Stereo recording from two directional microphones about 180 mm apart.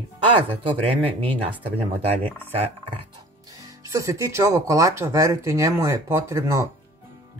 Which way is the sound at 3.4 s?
20° right (ahead or behind).